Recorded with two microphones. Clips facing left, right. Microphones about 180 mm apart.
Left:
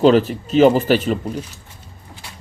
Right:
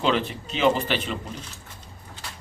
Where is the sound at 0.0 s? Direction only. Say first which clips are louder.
Left 11 dB; 40° left (ahead or behind).